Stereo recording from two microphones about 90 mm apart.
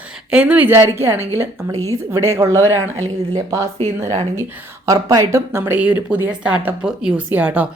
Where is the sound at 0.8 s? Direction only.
30° right (ahead or behind).